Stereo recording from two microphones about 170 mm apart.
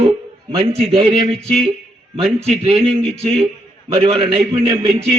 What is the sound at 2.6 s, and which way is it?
A man's voice, 35° right (ahead or behind).